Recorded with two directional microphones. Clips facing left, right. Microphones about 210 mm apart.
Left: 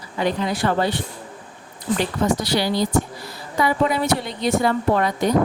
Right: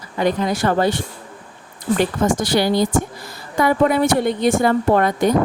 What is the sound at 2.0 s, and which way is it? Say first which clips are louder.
Speech: right 3 dB; 50° right (ahead or behind).